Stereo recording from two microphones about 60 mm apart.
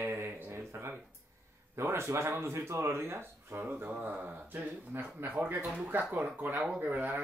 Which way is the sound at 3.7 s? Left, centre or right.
Right.